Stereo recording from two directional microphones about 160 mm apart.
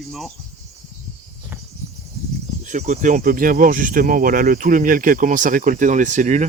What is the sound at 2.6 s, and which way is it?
Speech, 50° right (ahead or behind).